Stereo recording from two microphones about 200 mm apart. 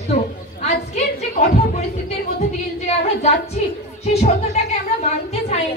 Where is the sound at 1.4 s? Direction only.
35° left (ahead or behind).